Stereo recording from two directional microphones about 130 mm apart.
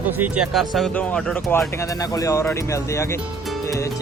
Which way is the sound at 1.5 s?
25° left (ahead or behind).